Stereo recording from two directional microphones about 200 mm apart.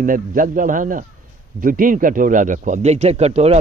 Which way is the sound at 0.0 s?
40° right (ahead or behind).